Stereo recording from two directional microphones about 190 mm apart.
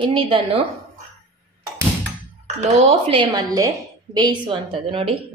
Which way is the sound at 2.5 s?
30° right (ahead or behind).